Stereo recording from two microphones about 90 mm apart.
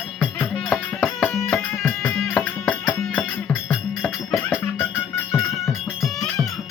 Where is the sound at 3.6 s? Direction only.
5° right (ahead or behind).